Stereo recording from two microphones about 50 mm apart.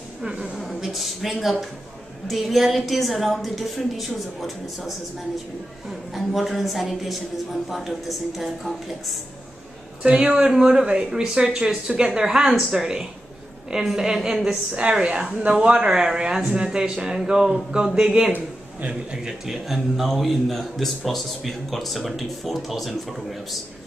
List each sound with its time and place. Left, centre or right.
0.2 s a woman's voice: centre
0.6 s a man's voice: centre
10.0 s a woman's voice: right
10.3 s speech: centre
14.7 s a woman's voice: right
19.4 s a man's voice: centre